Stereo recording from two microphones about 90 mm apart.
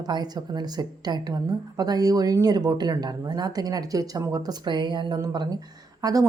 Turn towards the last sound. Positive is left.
turn(degrees=-40)  # may be behind; listen again after turning